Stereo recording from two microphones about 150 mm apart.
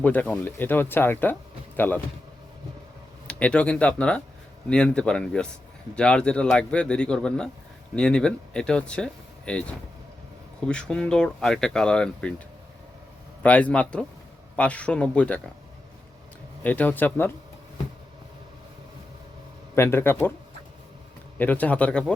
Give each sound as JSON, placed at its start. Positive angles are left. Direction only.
{"t": 0.0, "sound": "speech", "side_deg": 10}
{"t": 3.2, "sound": "speech", "side_deg": 10}
{"t": 13.4, "sound": "speech", "side_deg": 10}
{"t": 16.6, "sound": "speech", "side_deg": 10}
{"t": 19.7, "sound": "speech", "side_deg": 15}
{"t": 21.3, "sound": "speech", "side_deg": 10}